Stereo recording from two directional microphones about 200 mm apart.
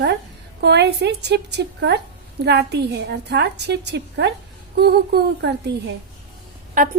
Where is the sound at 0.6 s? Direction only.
55° right (ahead or behind).